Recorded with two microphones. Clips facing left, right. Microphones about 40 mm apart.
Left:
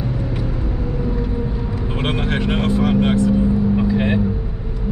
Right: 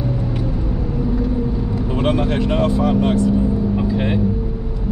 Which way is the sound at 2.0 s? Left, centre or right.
Left.